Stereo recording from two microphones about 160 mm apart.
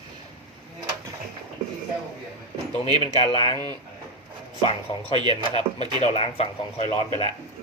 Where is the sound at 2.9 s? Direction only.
35° left (ahead or behind).